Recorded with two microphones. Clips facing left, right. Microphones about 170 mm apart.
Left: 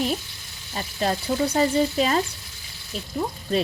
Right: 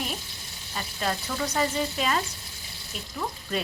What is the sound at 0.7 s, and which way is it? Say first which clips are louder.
Frying: left 5 dB; 35° left (ahead or behind).